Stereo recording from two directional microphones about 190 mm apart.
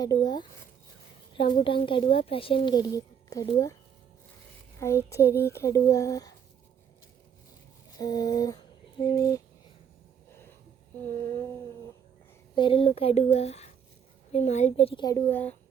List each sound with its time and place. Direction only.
0.0 s a woman's voice: 20° left (ahead or behind)
1.6 s a woman's voice: 25° left (ahead or behind)
4.8 s speech: 15° left (ahead or behind)
7.9 s a sound: 20° left (ahead or behind)
11.0 s speech: 15° left (ahead or behind)
12.5 s speech: 25° left (ahead or behind)
15.3 s speech: 10° left (ahead or behind)